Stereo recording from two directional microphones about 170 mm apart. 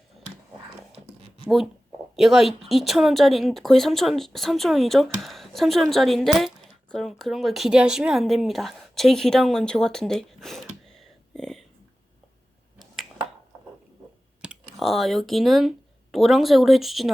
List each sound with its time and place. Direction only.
2.1 s speech: centre (ahead or behind)
14.4 s speech: 5° right (ahead or behind)